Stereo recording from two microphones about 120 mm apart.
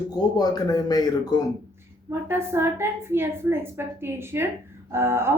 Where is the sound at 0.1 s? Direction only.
35° left (ahead or behind).